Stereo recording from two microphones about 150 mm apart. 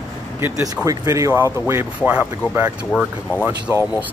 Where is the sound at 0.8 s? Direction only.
20° right (ahead or behind).